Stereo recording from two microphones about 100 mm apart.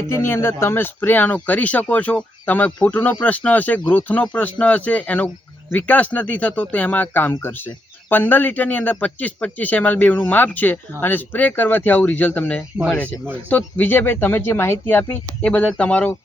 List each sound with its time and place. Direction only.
0.1 s speech: 25° left (ahead or behind)